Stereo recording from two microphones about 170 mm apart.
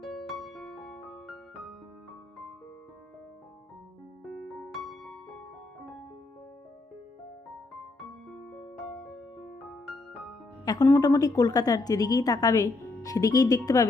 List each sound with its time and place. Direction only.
0.0 s music: centre (ahead or behind)
4.2 s music: centre (ahead or behind)
8.3 s music: centre (ahead or behind)
10.7 s a woman's voice: 20° left (ahead or behind)